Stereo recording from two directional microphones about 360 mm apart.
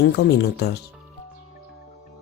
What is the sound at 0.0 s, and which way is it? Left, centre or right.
Speech, left.